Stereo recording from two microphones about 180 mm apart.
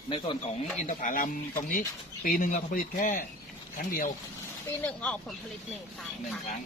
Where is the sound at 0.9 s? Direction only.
45° left (ahead or behind).